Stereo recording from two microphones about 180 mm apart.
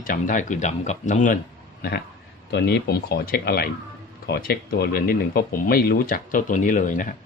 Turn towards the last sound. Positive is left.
turn(degrees=45)  # may be behind; listen again after turning